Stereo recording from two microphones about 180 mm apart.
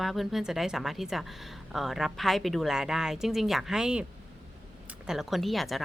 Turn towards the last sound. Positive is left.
turn(degrees=0)  # may be behind; listen again after turning